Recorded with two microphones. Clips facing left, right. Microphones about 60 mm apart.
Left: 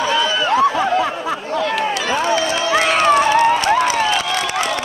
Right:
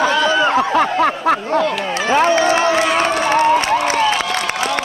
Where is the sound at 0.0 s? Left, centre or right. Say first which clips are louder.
Right 3 dB; right.